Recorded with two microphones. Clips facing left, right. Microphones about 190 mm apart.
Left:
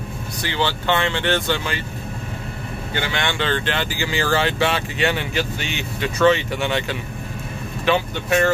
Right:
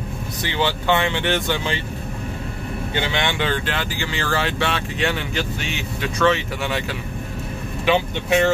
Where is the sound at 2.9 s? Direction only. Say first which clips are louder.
Even; 20° right (ahead or behind).